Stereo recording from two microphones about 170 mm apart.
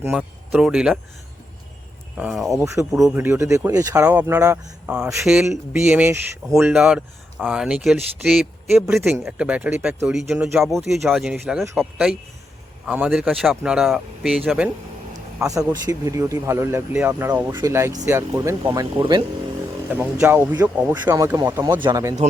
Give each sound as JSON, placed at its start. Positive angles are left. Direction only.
{"t": 0.2, "sound": "speech", "side_deg": -5}
{"t": 2.1, "sound": "speech", "side_deg": -5}
{"t": 3.2, "sound": "speech", "side_deg": -15}
{"t": 5.2, "sound": "speech", "side_deg": -5}
{"t": 8.7, "sound": "speech", "side_deg": -15}
{"t": 15.4, "sound": "speech", "side_deg": -20}
{"t": 20.1, "sound": "speech", "side_deg": -15}